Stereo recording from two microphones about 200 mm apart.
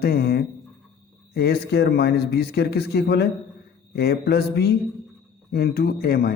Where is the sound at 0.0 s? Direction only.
50° left (ahead or behind).